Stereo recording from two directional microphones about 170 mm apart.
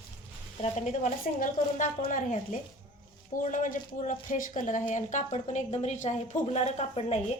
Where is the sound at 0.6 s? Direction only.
45° left (ahead or behind).